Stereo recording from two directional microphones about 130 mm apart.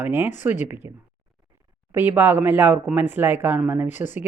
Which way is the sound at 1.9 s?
15° right (ahead or behind).